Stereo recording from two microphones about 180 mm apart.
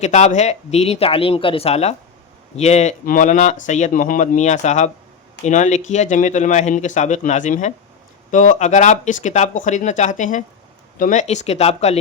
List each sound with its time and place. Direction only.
0.0 s speech: 40° left (ahead or behind)